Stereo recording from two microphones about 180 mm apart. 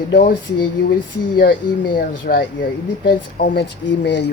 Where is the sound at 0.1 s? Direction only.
55° left (ahead or behind).